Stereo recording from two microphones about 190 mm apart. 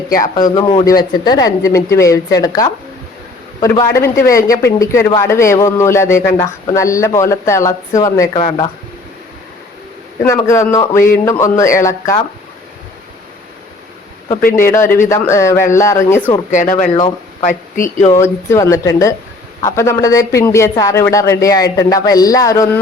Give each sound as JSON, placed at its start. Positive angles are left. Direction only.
{"t": 0.5, "sound": "a man's voice", "side_deg": 25}
{"t": 8.3, "sound": "a man's voice", "side_deg": 30}
{"t": 10.2, "sound": "a man's voice", "side_deg": 15}
{"t": 14.6, "sound": "a man's voice", "side_deg": 15}
{"t": 16.5, "sound": "speech", "side_deg": 40}
{"t": 18.1, "sound": "a man's voice", "side_deg": 15}